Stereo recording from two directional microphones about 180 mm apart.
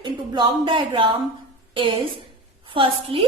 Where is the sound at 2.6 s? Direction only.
30° right (ahead or behind).